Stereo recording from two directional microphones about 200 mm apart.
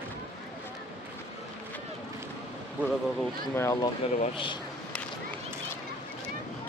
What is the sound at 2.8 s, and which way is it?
Speech, 10° right (ahead or behind).